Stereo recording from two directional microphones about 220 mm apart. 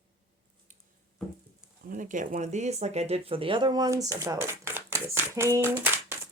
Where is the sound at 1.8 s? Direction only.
35° right (ahead or behind).